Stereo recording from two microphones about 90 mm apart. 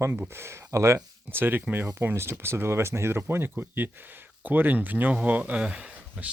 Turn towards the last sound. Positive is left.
turn(degrees=-10)  # may be behind; listen again after turning